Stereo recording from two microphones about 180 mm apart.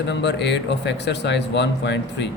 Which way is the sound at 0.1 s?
75° left (ahead or behind).